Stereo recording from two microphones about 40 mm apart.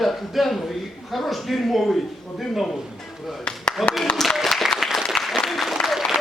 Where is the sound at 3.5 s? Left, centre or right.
Left.